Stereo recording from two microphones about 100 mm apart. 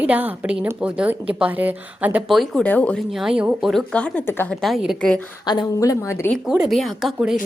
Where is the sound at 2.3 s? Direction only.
Centre (ahead or behind).